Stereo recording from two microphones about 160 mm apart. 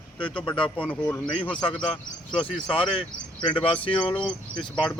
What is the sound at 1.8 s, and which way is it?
Speech, 35° left (ahead or behind).